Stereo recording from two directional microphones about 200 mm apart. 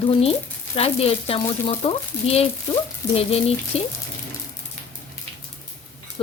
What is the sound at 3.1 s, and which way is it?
Stir, 30° left (ahead or behind).